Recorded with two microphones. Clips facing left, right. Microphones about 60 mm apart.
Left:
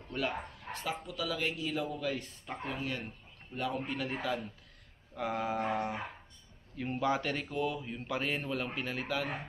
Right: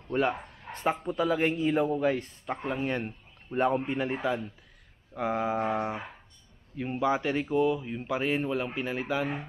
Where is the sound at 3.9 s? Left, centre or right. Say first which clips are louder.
Right 6 dB; right.